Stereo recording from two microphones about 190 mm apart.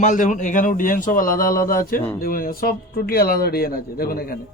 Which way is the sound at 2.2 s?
50° left (ahead or behind).